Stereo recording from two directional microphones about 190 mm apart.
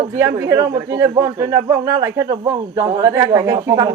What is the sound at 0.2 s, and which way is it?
A man's voice, 15° right (ahead or behind).